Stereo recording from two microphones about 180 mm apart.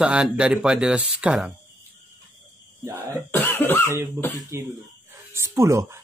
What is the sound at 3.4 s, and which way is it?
Cough, 10° left (ahead or behind).